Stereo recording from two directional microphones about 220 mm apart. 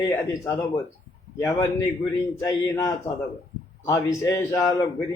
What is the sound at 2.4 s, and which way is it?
Speech, 15° left (ahead or behind).